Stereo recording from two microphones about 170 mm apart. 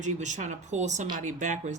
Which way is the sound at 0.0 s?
45° right (ahead or behind).